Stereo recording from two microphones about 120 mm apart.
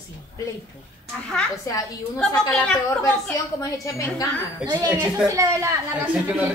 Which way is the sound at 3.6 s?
25° left (ahead or behind).